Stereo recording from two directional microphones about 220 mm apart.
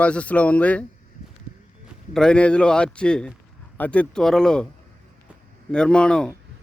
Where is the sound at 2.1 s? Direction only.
5° left (ahead or behind).